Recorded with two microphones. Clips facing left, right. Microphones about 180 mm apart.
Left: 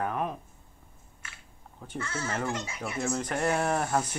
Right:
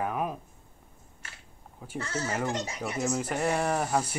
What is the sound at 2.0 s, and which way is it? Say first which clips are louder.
Speech: right 2 dB; 40° right (ahead or behind).